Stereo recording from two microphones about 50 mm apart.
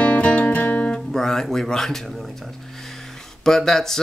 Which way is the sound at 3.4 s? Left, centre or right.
Centre.